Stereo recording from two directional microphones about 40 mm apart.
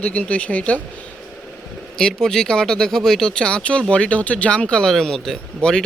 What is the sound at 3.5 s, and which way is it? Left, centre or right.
Speech, left.